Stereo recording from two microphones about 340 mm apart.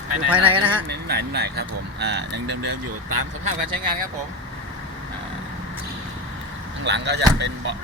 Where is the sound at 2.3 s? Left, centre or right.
Right.